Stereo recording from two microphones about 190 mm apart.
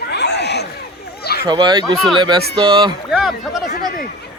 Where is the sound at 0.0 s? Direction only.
60° left (ahead or behind).